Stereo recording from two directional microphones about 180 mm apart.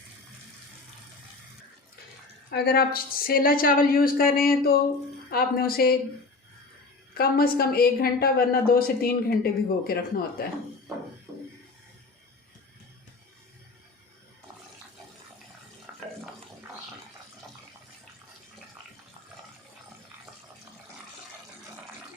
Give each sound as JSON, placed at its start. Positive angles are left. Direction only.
{"t": 2.5, "sound": "a woman's voice", "side_deg": 60}
{"t": 7.1, "sound": "a woman's voice", "side_deg": 60}
{"t": 15.9, "sound": "stir", "side_deg": -10}